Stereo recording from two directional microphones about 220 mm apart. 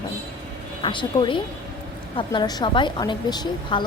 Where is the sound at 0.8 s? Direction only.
20° left (ahead or behind).